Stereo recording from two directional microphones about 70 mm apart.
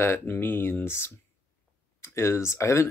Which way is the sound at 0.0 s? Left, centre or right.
Left.